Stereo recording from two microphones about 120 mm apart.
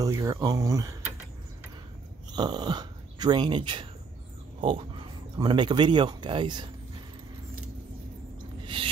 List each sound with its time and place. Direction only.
0.0 s speech: 30° right (ahead or behind)
2.3 s speech: 35° right (ahead or behind)